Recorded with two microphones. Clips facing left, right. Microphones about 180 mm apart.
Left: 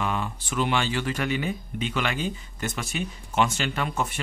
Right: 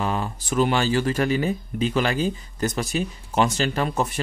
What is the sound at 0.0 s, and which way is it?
Speech, 35° right (ahead or behind).